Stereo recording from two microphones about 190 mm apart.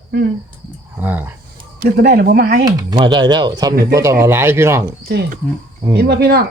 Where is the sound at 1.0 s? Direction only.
10° right (ahead or behind).